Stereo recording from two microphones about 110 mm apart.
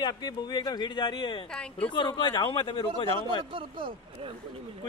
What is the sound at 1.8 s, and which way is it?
A man's voice, 45° left (ahead or behind).